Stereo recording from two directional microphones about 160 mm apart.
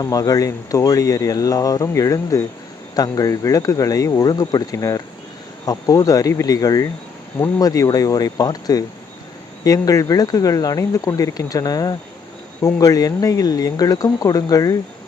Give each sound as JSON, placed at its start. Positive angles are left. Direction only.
{"t": 0.0, "sound": "speech", "side_deg": 20}